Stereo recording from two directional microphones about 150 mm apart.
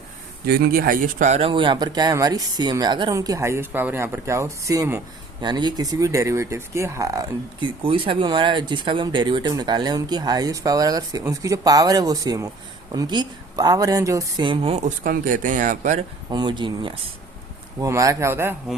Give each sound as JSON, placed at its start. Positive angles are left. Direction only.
{"t": 0.4, "sound": "speech", "side_deg": -90}
{"t": 7.8, "sound": "speech", "side_deg": -35}
{"t": 14.8, "sound": "speech", "side_deg": -70}
{"t": 16.3, "sound": "speech", "side_deg": -30}
{"t": 17.7, "sound": "speech", "side_deg": -20}